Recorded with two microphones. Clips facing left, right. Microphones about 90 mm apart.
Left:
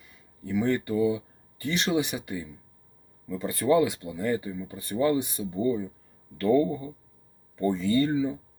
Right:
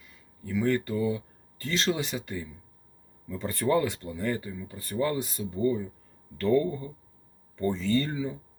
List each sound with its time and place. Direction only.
0.4 s speech: 20° left (ahead or behind)